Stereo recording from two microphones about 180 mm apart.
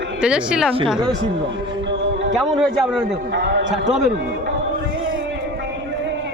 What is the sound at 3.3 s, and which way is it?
Speech, 75° right (ahead or behind).